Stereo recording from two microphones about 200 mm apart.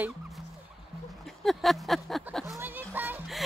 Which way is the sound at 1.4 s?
Centre (ahead or behind).